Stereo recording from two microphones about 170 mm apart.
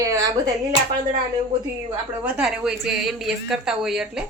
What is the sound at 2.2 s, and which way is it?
A woman's voice, 5° right (ahead or behind).